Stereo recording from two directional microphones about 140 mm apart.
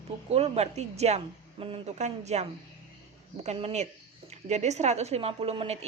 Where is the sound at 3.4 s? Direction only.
50° right (ahead or behind).